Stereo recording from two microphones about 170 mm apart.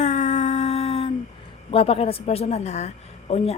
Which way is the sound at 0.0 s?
45° left (ahead or behind).